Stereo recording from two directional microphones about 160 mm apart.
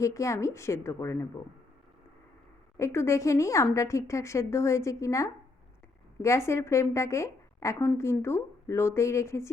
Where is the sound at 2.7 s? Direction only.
15° left (ahead or behind).